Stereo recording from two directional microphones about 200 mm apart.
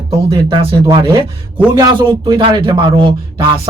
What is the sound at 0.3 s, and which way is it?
A man's voice, 20° right (ahead or behind).